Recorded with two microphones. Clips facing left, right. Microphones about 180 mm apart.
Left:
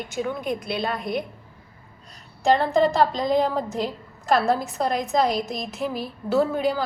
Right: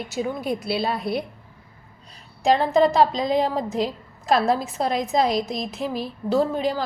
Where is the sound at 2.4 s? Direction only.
Centre (ahead or behind).